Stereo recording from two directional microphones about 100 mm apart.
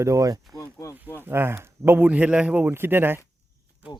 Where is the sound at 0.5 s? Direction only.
30° left (ahead or behind).